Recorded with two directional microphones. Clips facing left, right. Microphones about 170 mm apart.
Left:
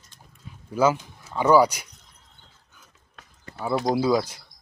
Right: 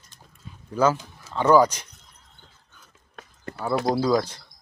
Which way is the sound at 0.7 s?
10° left (ahead or behind).